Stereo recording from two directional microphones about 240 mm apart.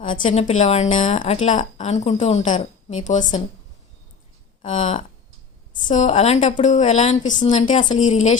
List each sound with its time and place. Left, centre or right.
0.0 s a sound: left
0.3 s a woman's voice: left
4.6 s a woman's voice: left